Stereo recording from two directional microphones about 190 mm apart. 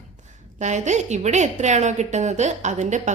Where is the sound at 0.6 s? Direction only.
40° right (ahead or behind).